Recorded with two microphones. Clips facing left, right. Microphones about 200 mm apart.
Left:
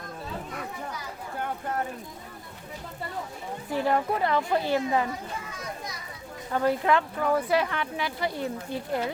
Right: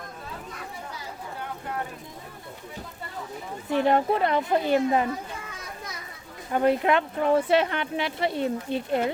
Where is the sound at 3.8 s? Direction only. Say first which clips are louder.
Right 3 dB; 25° right (ahead or behind).